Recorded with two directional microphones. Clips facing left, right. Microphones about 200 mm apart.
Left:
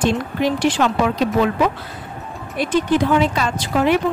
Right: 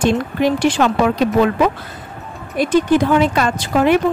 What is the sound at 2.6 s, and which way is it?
Speech, 45° right (ahead or behind).